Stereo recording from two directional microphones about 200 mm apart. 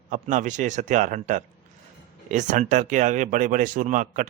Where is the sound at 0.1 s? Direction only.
40° right (ahead or behind).